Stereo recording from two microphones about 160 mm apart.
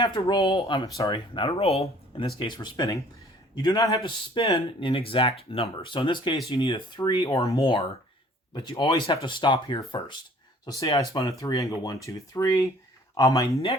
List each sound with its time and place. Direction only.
0.0 s speech: 30° left (ahead or behind)